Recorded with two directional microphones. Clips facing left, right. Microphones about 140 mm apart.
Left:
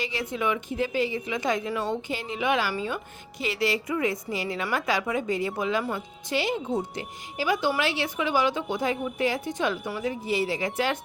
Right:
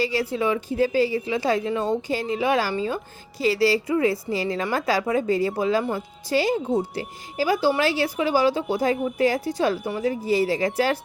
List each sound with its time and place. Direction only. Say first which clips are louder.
0.0 s a woman's voice: right 5 dB; 35° right (ahead or behind)